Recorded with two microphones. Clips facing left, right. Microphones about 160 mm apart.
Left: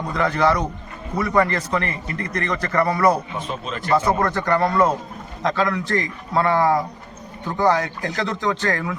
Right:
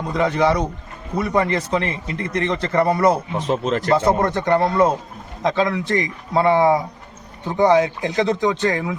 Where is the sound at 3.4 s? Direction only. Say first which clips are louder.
Right 8 dB; 85° right.